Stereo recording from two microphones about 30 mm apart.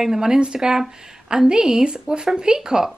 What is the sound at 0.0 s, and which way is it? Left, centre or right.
Speech, centre.